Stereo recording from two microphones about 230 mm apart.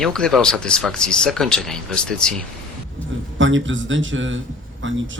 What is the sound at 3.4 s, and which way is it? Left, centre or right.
Speech, right.